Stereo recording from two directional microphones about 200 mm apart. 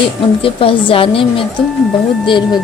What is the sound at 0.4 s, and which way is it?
Speech, 25° left (ahead or behind).